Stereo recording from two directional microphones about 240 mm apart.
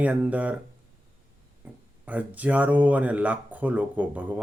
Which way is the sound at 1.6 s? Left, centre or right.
Centre.